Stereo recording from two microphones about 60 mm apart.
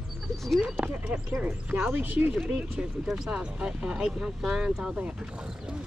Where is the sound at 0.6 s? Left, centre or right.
Right.